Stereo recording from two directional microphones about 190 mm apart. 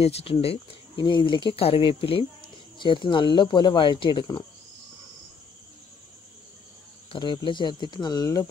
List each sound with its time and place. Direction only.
0.0 s speech: 30° left (ahead or behind)
7.1 s speech: 25° left (ahead or behind)